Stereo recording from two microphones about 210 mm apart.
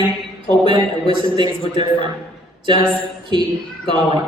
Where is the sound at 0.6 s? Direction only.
25° right (ahead or behind).